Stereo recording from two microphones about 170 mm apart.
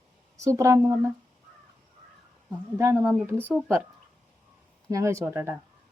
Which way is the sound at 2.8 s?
20° right (ahead or behind).